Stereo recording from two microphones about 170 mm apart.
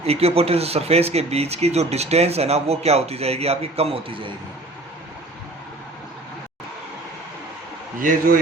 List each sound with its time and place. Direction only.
0.0 s speech: 35° right (ahead or behind)